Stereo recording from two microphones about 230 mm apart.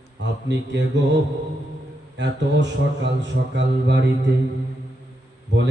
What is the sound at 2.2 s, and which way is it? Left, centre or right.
A man's voice, right.